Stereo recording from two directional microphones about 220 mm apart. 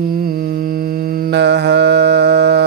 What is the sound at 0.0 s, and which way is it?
Mantra, 40° right (ahead or behind).